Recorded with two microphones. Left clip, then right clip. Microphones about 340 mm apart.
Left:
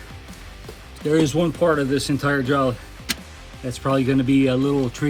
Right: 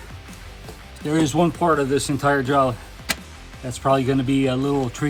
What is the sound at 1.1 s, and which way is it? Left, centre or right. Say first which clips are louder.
Speech: left 1 dB; centre.